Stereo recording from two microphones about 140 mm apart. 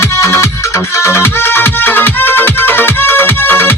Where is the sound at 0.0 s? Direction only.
20° left (ahead or behind).